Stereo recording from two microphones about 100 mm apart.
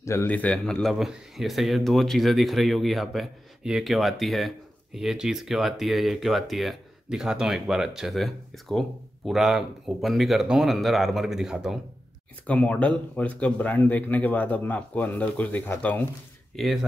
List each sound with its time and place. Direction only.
0.0 s a man's voice: 25° left (ahead or behind)
0.3 s speech: 10° left (ahead or behind); by 11.8 s 5° right (ahead or behind)
12.4 s speech: 15° left (ahead or behind)
16.5 s speech: centre (ahead or behind)